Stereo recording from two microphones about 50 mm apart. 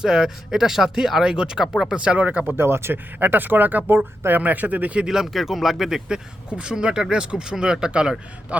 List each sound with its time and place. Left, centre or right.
0.0 s speech: centre
2.0 s speech: right
2.6 s speech: right
5.0 s speech: centre
6.1 s speech: centre